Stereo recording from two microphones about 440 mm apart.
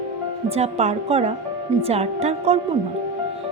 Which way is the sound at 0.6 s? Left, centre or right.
Centre.